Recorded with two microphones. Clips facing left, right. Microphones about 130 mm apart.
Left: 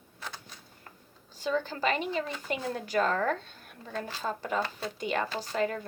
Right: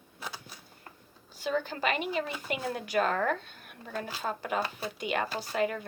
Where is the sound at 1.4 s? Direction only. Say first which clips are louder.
Left 1 dB; 35° left (ahead or behind).